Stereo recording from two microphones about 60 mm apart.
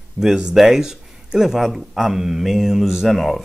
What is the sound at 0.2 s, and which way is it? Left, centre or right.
Speech, centre.